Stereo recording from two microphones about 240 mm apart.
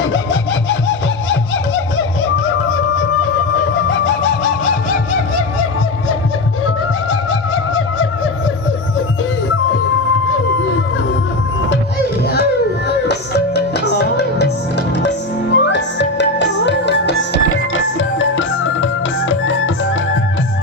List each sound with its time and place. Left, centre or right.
2.3 s music: left
3.8 s a sound: left
7.1 s music: left
13.1 s music: left
15.5 s music: left